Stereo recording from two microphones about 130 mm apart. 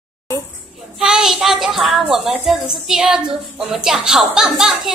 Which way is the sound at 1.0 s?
5° right (ahead or behind).